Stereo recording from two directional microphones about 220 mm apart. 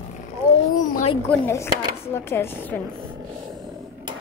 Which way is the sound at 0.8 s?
35° left (ahead or behind).